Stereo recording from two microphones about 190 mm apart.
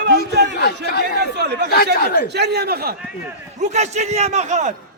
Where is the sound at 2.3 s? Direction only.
60° right (ahead or behind).